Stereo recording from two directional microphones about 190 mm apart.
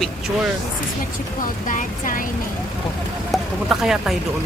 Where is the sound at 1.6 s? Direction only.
45° left (ahead or behind).